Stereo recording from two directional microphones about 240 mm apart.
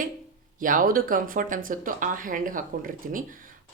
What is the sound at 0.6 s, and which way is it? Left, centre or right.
Speech, right.